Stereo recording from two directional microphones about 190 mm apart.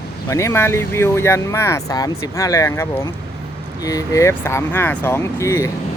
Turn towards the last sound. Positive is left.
turn(degrees=15)  # may be behind; listen again after turning